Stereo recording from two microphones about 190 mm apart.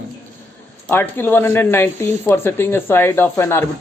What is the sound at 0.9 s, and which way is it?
Speech, 10° left (ahead or behind).